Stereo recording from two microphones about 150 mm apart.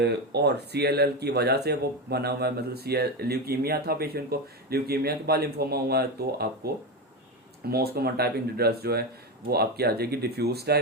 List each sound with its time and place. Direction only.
0.0 s speech: 90° right
7.7 s speech: 90° right